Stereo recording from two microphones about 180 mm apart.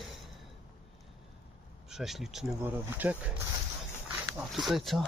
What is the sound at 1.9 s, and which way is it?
Speech, centre (ahead or behind).